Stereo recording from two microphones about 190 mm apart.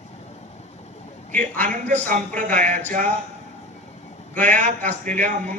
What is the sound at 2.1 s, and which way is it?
Speech, 45° right (ahead or behind).